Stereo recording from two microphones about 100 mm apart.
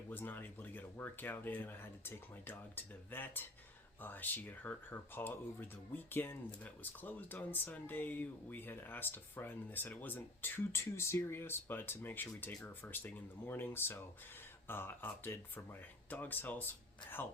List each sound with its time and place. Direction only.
0.1 s speech: 20° left (ahead or behind)